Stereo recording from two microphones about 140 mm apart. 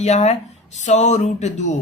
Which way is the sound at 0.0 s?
50° left (ahead or behind).